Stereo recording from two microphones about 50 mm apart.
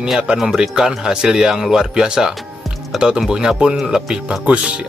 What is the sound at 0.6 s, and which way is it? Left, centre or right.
Speech, centre.